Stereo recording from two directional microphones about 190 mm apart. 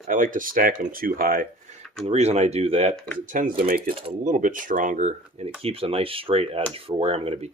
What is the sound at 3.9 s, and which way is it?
Speech, 35° right (ahead or behind).